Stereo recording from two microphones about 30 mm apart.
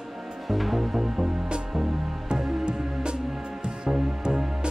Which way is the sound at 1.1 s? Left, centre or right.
Right.